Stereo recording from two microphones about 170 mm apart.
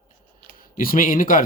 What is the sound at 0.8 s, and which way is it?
Speech, 55° left (ahead or behind).